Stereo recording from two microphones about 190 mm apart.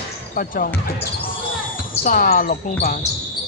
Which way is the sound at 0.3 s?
50° left (ahead or behind).